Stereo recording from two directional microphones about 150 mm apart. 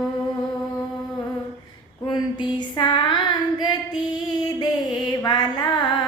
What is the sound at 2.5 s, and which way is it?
Music, 30° left (ahead or behind).